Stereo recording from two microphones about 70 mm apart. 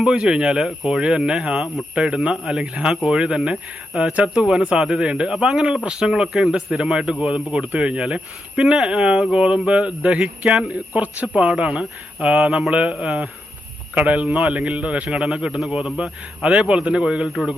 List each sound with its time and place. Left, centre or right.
0.0 s speech: centre
4.1 s speech: centre
4.4 s speech: centre